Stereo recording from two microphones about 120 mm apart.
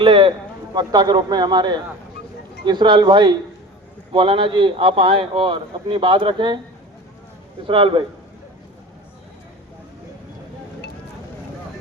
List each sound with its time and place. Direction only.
0.0 s a man's voice: 45° right (ahead or behind)
7.7 s a man's voice: 45° right (ahead or behind)